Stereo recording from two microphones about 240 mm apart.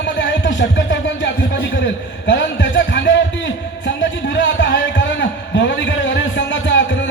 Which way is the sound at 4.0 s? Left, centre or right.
Left.